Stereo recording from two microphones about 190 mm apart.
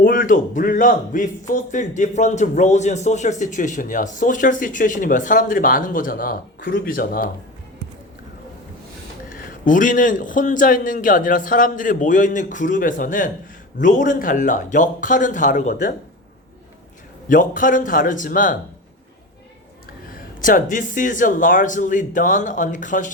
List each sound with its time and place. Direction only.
0.0 s a man's voice: 45° left (ahead or behind)
9.6 s a man's voice: 45° left (ahead or behind)
17.2 s a man's voice: 45° left (ahead or behind)
20.4 s a man's voice: 45° left (ahead or behind)